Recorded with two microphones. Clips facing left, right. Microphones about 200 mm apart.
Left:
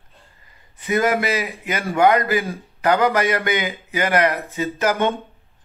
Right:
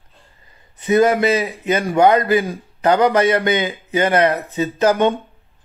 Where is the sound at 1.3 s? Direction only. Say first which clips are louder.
Right 6 dB; 30° right (ahead or behind).